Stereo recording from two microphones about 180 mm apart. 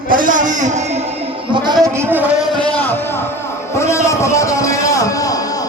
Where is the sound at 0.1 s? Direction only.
50° right (ahead or behind).